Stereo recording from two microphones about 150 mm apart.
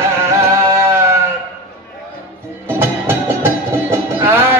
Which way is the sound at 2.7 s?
15° right (ahead or behind).